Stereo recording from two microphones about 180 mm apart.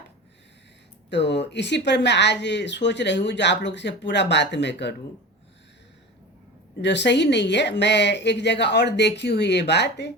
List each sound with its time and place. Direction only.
1.1 s speech: 75° left (ahead or behind)
6.8 s speech: 75° left (ahead or behind)